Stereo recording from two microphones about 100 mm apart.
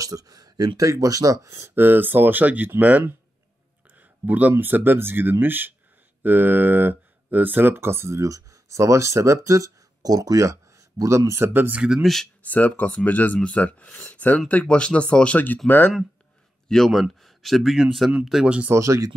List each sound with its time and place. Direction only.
0.0 s speech: 35° right (ahead or behind)
1.8 s speech: 20° right (ahead or behind)
4.3 s speech: 15° right (ahead or behind)
11.8 s speech: 5° right (ahead or behind)
12.4 s speech: 15° left (ahead or behind)
16.6 s speech: 5° left (ahead or behind)
18.7 s speech: 30° right (ahead or behind)